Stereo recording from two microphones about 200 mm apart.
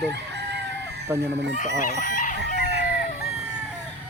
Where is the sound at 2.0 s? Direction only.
40° left (ahead or behind).